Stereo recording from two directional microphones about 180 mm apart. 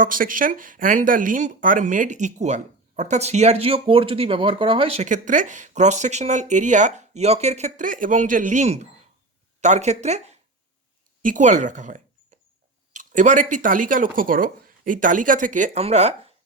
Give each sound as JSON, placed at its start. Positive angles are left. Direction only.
{"t": 0.0, "sound": "speech", "side_deg": -50}